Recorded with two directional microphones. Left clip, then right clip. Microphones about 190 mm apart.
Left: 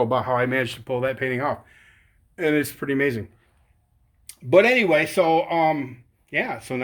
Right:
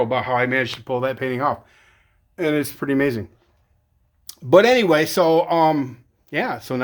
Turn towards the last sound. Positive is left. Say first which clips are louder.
# right 2 dB
turn(degrees=-25)  # may be behind; listen again after turning